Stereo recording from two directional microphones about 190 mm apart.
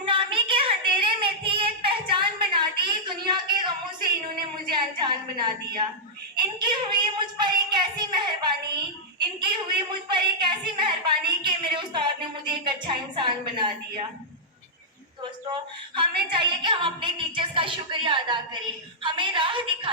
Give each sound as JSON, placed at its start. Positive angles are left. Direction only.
{"t": 0.0, "sound": "child singing", "side_deg": -25}
{"t": 6.3, "sound": "a sound", "side_deg": -25}
{"t": 16.0, "sound": "a woman's voice", "side_deg": -25}